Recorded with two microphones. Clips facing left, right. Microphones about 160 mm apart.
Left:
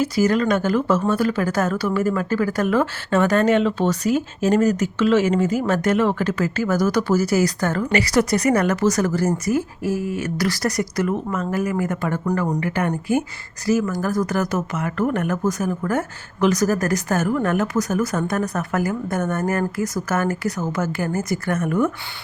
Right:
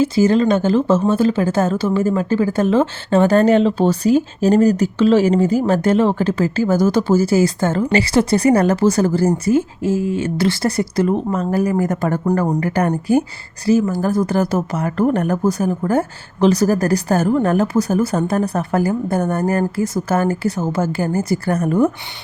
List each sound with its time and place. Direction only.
0.0 s a woman's voice: 25° right (ahead or behind)